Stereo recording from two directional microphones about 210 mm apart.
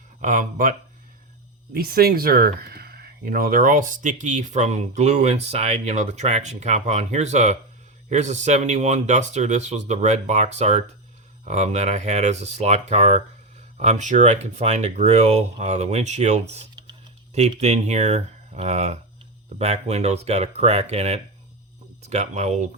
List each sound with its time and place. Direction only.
0.2 s speech: 40° right (ahead or behind)
1.7 s speech: 45° right (ahead or behind)